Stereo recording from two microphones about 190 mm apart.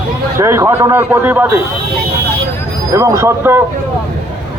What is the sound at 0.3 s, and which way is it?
A man's voice, 15° right (ahead or behind).